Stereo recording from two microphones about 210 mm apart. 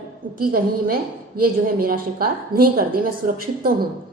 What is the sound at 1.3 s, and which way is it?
A woman's voice, 45° right (ahead or behind).